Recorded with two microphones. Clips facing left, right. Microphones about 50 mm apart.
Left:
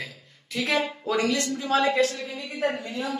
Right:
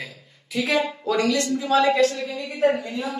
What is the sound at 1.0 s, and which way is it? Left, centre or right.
Speech, centre.